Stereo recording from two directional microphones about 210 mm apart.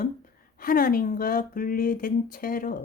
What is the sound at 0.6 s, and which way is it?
Speech, 45° left (ahead or behind).